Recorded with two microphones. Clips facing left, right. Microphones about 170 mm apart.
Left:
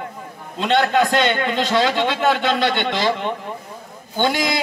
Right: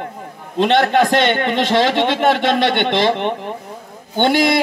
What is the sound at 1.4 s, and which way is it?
A man's voice, 60° right (ahead or behind).